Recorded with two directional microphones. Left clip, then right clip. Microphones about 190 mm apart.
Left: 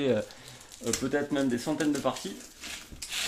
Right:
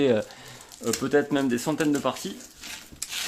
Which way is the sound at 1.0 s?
45° right (ahead or behind).